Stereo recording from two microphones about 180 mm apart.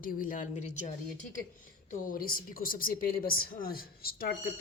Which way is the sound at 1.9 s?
50° left (ahead or behind).